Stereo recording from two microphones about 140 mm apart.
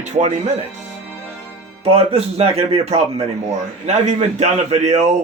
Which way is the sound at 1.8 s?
45° right (ahead or behind).